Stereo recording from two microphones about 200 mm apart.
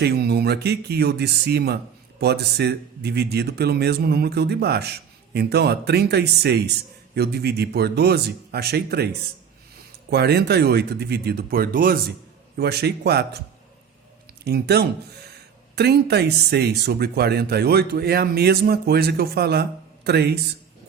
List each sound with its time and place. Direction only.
0.0 s speech: 55° right (ahead or behind)
14.4 s speech: 50° right (ahead or behind)